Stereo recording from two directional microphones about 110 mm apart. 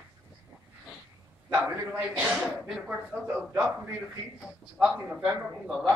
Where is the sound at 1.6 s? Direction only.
10° right (ahead or behind).